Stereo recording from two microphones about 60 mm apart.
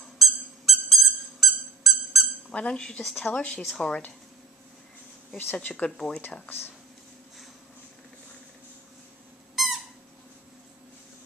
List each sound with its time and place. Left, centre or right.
0.2 s a sound: centre
2.5 s speech: centre
3.0 s speech: centre
3.3 s speech: centre
3.6 s speech: centre
5.5 s speech: left
5.9 s speech: centre
9.6 s squeak: centre